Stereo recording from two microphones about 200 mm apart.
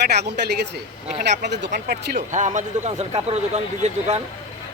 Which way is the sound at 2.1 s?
40° right (ahead or behind).